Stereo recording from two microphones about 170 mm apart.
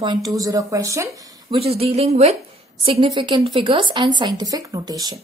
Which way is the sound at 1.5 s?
35° right (ahead or behind).